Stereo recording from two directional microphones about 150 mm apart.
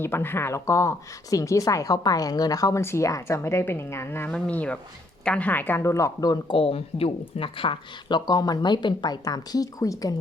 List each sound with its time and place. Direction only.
0.0 s speech: 15° left (ahead or behind)